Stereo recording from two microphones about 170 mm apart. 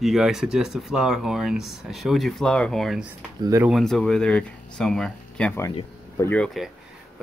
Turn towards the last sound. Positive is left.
turn(degrees=10)  # may be behind; listen again after turning